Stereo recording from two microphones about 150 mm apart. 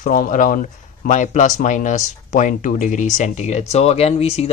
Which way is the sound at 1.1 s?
55° left (ahead or behind).